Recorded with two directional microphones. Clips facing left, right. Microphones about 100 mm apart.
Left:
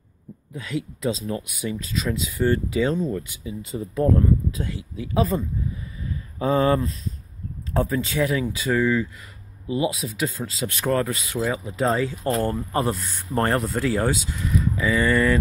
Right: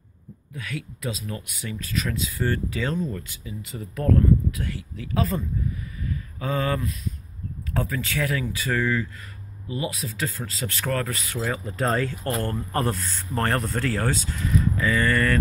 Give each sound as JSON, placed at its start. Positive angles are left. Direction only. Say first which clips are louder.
{"t": 0.5, "sound": "speech", "louder": "left 5 dB", "side_deg": 25}
{"t": 1.4, "sound": "speech", "louder": "left 5 dB", "side_deg": 15}
{"t": 6.0, "sound": "a sound", "louder": "left 6 dB", "side_deg": 25}
{"t": 7.7, "sound": "speech", "louder": "left 5 dB", "side_deg": 25}